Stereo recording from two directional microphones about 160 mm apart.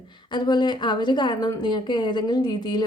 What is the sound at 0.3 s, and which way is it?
A woman's voice, 25° left (ahead or behind).